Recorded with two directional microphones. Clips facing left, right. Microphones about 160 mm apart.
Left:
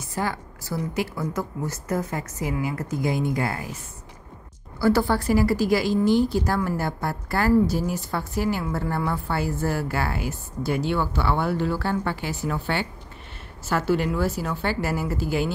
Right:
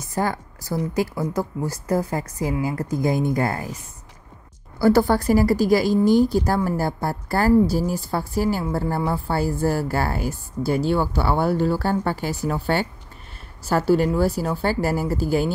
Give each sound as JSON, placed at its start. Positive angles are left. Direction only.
{"t": 0.1, "sound": "a woman's voice", "side_deg": -40}
{"t": 4.7, "sound": "a woman's voice", "side_deg": -40}